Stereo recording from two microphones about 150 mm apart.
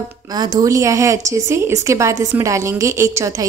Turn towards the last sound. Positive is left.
turn(degrees=-20)  # may be behind; listen again after turning